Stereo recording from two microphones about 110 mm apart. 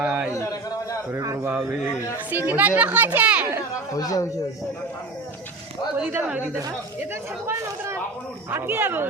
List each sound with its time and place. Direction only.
0.0 s a man's voice: 10° right (ahead or behind)
2.3 s speech: 15° right (ahead or behind)
3.9 s a man's voice: 35° left (ahead or behind)
6.0 s speech: 15° right (ahead or behind)
8.4 s speech: 20° right (ahead or behind)